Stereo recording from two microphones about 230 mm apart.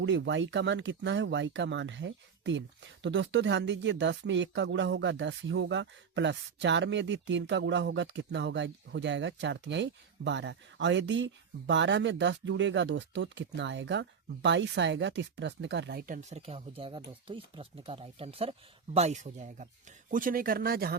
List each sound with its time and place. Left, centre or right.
0.0 s speech: right